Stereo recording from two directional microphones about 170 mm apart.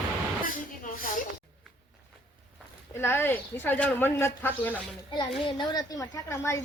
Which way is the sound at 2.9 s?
15° left (ahead or behind).